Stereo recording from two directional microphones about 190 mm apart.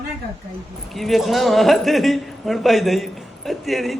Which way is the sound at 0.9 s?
Centre (ahead or behind).